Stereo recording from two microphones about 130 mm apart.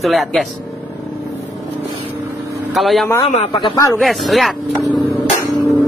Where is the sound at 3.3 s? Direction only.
55° left (ahead or behind).